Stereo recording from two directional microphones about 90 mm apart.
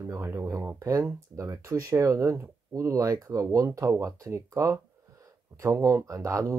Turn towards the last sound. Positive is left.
turn(degrees=-35)  # may be behind; listen again after turning